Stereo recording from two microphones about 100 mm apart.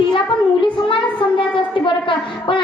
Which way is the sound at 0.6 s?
60° left (ahead or behind).